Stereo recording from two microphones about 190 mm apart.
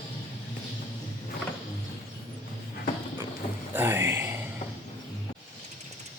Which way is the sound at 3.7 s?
10° right (ahead or behind).